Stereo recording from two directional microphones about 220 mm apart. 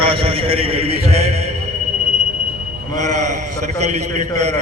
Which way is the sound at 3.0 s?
30° right (ahead or behind).